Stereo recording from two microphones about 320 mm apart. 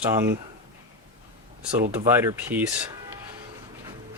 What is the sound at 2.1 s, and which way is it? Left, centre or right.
Speech, centre.